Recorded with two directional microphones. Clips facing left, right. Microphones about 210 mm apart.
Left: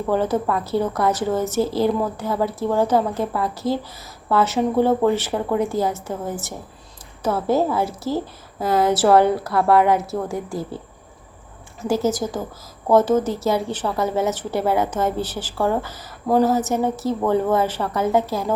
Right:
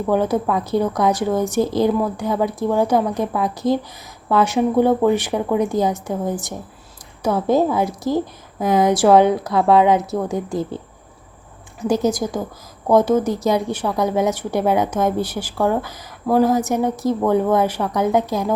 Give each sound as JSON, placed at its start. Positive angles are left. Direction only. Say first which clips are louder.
{"t": 0.1, "sound": "a woman's voice", "louder": "right 2 dB", "side_deg": -15}
{"t": 11.8, "sound": "a woman's voice", "louder": "right 2 dB", "side_deg": -15}